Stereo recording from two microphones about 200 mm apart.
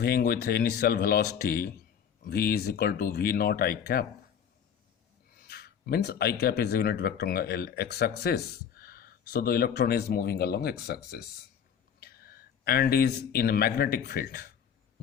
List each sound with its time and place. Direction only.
0.0 s speech: 50° left (ahead or behind)
5.4 s speech: 55° left (ahead or behind)